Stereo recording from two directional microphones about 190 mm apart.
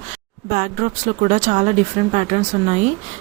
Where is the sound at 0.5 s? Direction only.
45° right (ahead or behind).